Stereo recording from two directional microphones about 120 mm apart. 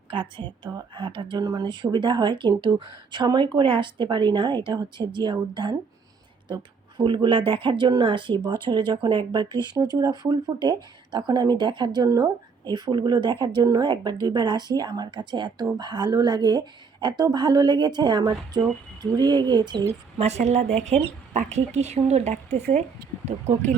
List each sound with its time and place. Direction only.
0.1 s speech: 45° right (ahead or behind)
20.1 s speech: 65° right (ahead or behind)
23.6 s speech: 85° right